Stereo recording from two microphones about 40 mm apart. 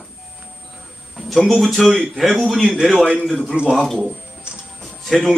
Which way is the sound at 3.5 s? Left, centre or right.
Right.